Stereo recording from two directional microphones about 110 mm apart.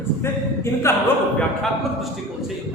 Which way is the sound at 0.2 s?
25° left (ahead or behind).